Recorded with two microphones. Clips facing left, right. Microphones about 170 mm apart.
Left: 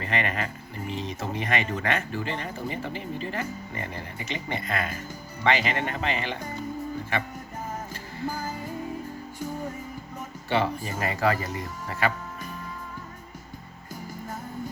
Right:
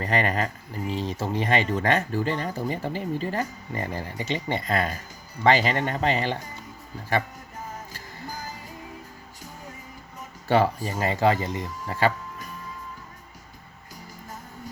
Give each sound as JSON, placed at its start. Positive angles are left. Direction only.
{"t": 0.0, "sound": "speech", "side_deg": -40}
{"t": 10.5, "sound": "speech", "side_deg": -40}
{"t": 11.0, "sound": "speech", "side_deg": -25}